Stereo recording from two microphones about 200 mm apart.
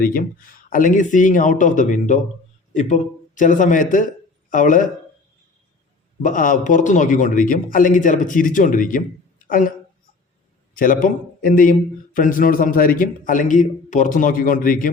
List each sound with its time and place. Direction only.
0.0 s a man's voice: 45° left (ahead or behind)
6.2 s a man's voice: 40° left (ahead or behind)
10.8 s a man's voice: 45° left (ahead or behind)